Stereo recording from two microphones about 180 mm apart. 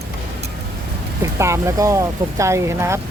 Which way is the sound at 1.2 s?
15° right (ahead or behind).